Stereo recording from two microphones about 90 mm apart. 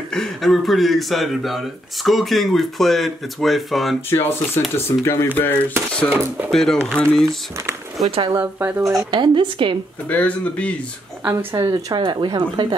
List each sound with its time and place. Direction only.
0.1 s speech: 5° left (ahead or behind)
4.1 s speech: 25° left (ahead or behind)
6.5 s speech: 5° left (ahead or behind)
8.4 s speech: 25° right (ahead or behind)
9.1 s speech: 60° right (ahead or behind)
10.0 s speech: 15° left (ahead or behind)
11.2 s speech: 40° right (ahead or behind)
12.0 s speech: 60° right (ahead or behind)